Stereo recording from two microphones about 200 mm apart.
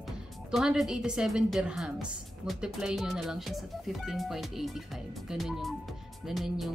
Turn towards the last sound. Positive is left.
turn(degrees=0)  # may be behind; listen again after turning